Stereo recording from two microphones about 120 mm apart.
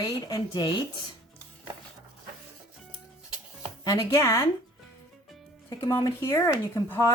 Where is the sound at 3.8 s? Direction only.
30° left (ahead or behind).